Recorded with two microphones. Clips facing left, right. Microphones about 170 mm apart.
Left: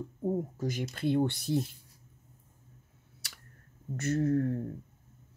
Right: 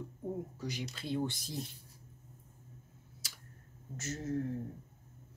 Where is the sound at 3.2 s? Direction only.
65° left (ahead or behind).